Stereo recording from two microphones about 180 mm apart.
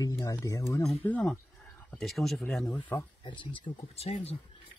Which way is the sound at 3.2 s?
25° left (ahead or behind).